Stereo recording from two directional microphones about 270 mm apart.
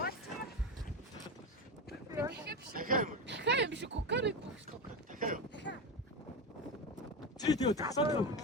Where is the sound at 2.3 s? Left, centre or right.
Right.